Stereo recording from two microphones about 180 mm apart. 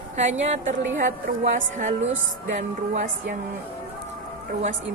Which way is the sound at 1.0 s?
45° right (ahead or behind).